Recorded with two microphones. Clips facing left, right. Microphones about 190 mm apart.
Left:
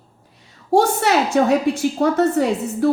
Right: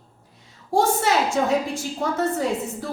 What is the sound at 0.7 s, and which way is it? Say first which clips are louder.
A woman's voice: left 4 dB; 70° left (ahead or behind).